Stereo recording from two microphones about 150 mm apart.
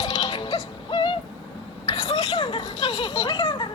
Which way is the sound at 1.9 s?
40° left (ahead or behind).